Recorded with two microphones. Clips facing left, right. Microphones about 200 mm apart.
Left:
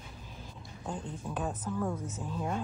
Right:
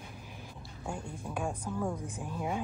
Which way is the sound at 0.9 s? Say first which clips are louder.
Left 1 dB; 10° right (ahead or behind).